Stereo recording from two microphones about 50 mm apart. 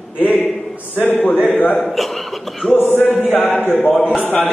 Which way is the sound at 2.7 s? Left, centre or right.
Left.